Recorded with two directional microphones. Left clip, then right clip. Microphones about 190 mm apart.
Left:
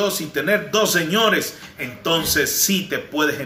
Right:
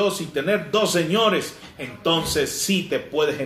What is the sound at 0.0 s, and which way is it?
Speech, centre (ahead or behind).